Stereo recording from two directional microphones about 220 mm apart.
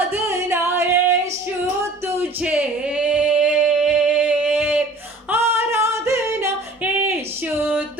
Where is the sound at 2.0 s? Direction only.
5° right (ahead or behind).